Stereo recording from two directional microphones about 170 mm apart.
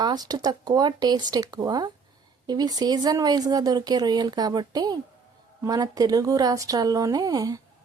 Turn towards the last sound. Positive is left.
turn(degrees=-20)  # may be behind; listen again after turning